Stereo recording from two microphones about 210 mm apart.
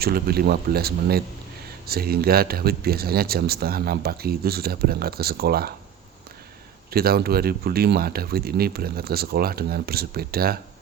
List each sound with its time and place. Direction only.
0.0 s speech: 45° right (ahead or behind)
6.9 s speech: 45° right (ahead or behind)